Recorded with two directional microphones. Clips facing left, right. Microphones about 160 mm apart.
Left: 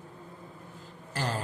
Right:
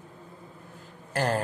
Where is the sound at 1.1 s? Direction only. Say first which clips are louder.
Right 6 dB; 55° right (ahead or behind).